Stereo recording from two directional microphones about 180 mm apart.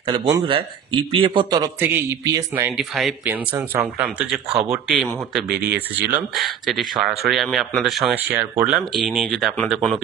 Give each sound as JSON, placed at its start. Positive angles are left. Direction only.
{"t": 0.0, "sound": "a man's voice", "side_deg": -25}
{"t": 8.3, "sound": "speech", "side_deg": -10}